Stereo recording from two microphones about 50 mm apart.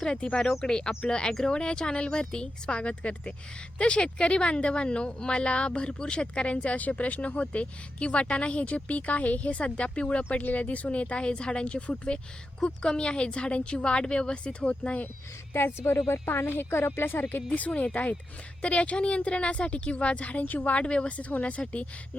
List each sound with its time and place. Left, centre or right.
0.0 s speech: centre
10.2 s speech: left
15.5 s a woman's voice: left
17.7 s speech: left
20.8 s speech: centre